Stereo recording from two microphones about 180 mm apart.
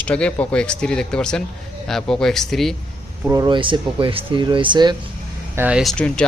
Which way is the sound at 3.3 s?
20° right (ahead or behind).